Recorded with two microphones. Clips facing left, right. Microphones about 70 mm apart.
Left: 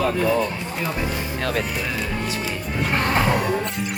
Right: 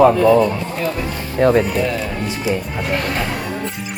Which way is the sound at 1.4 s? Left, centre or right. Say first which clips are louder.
Right 13 dB; right.